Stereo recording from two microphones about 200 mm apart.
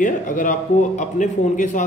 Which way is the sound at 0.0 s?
40° left (ahead or behind).